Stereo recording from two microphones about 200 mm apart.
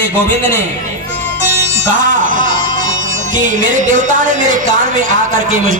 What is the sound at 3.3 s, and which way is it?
A woman's voice, 40° right (ahead or behind).